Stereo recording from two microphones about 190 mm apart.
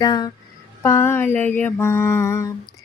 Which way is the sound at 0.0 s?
20° left (ahead or behind).